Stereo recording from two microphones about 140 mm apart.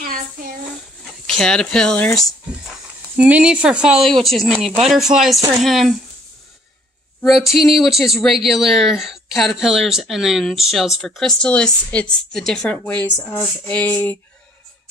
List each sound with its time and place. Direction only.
0.0 s a sound: 90° right
1.4 s speech: 5° left (ahead or behind)
3.2 s speech: 10° right (ahead or behind)
7.2 s speech: centre (ahead or behind)